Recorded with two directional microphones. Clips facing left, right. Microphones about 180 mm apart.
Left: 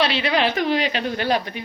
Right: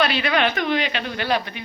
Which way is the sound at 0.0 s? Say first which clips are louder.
Even; 30° left (ahead or behind).